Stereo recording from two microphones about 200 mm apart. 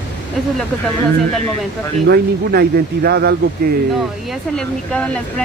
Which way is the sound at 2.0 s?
55° right (ahead or behind).